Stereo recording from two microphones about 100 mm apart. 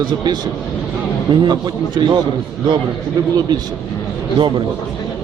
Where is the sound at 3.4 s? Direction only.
45° right (ahead or behind).